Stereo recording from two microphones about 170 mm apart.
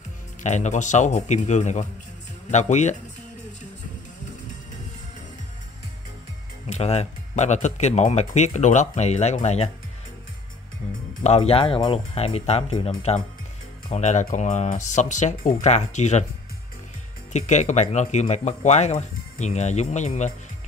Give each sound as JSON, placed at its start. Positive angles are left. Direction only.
{"t": 0.4, "sound": "speech", "side_deg": 45}
{"t": 6.7, "sound": "speech", "side_deg": 40}
{"t": 11.2, "sound": "speech", "side_deg": 35}
{"t": 17.3, "sound": "speech", "side_deg": 45}